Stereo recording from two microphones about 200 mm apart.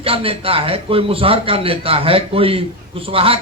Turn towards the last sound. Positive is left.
turn(degrees=-30)  # may be behind; listen again after turning